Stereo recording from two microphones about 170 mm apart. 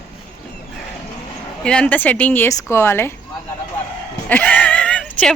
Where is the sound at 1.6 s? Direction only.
5° left (ahead or behind).